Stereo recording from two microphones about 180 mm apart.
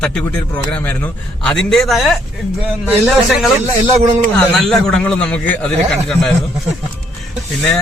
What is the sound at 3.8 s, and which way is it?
Speech, 40° right (ahead or behind).